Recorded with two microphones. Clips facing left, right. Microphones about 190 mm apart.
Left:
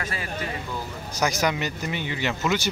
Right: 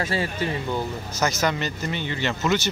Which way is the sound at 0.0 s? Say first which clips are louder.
Right 6 dB; 30° right (ahead or behind).